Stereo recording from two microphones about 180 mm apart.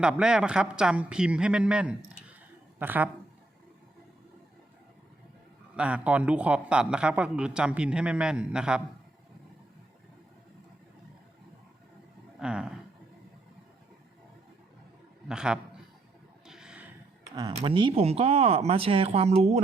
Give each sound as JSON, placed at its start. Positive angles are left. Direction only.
{"t": 0.0, "sound": "a man's voice", "side_deg": -5}
{"t": 5.7, "sound": "a man's voice", "side_deg": -5}
{"t": 12.4, "sound": "a man's voice", "side_deg": -5}
{"t": 15.3, "sound": "a man's voice", "side_deg": -5}
{"t": 16.5, "sound": "music", "side_deg": -5}
{"t": 17.6, "sound": "speech", "side_deg": -30}